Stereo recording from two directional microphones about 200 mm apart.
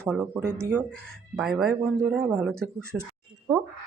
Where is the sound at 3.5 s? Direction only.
15° right (ahead or behind).